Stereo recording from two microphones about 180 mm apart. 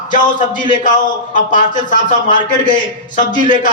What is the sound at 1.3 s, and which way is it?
Speech, 45° left (ahead or behind).